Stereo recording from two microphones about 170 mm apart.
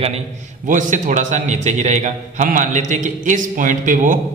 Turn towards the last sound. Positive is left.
turn(degrees=-50)  # may be behind; listen again after turning